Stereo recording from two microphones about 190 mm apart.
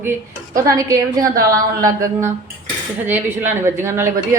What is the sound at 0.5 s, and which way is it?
A woman's voice, 20° right (ahead or behind).